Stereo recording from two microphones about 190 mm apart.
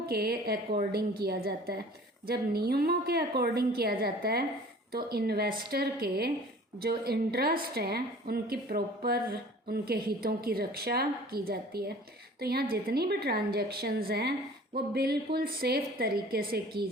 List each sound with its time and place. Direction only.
0.1 s a woman's voice: 55° right (ahead or behind)